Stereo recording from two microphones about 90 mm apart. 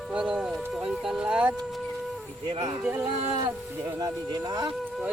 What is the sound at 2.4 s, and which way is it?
Speech, 45° right (ahead or behind).